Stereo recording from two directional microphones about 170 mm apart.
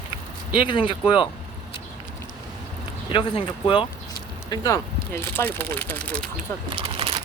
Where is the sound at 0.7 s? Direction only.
30° left (ahead or behind).